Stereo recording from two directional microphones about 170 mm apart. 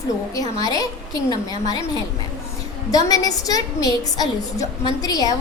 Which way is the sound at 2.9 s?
20° left (ahead or behind).